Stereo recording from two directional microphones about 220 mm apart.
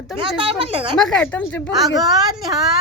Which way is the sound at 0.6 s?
25° right (ahead or behind).